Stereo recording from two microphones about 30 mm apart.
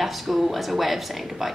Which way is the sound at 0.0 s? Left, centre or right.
Centre.